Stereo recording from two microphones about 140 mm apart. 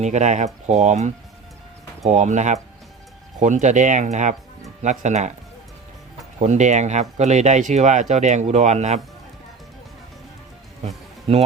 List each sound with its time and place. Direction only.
0.0 s speech: 55° right (ahead or behind)
6.4 s speech: 55° right (ahead or behind)
10.8 s music: 45° right (ahead or behind)